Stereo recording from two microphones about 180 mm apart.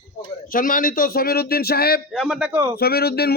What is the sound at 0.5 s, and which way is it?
Speech, 50° left (ahead or behind).